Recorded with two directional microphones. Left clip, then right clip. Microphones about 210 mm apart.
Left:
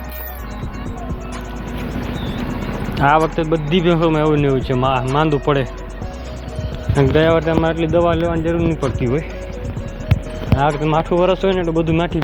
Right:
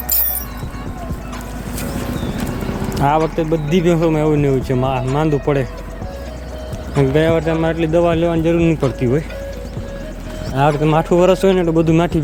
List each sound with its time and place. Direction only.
2.9 s a sound: 10° right (ahead or behind)
3.2 s speech: 10° right (ahead or behind)
6.9 s a man's voice: 5° right (ahead or behind)
8.2 s speech: 35° right (ahead or behind)
10.6 s speech: 35° right (ahead or behind)